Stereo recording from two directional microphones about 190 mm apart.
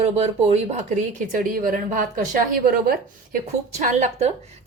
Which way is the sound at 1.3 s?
45° right (ahead or behind).